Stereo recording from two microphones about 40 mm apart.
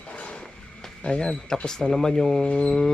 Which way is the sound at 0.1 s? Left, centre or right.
Left.